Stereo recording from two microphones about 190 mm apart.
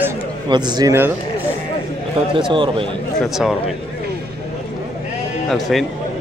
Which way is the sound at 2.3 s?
25° right (ahead or behind).